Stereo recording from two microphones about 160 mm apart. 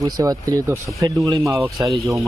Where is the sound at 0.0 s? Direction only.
20° right (ahead or behind).